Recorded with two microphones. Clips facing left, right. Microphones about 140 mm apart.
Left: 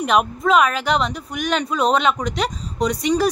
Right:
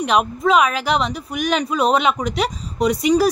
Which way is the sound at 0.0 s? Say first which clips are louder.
Right 1 dB; centre (ahead or behind).